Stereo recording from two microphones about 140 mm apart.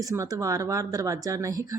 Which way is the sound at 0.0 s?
25° right (ahead or behind).